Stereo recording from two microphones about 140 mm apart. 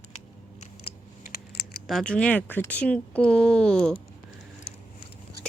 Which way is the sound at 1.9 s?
5° left (ahead or behind).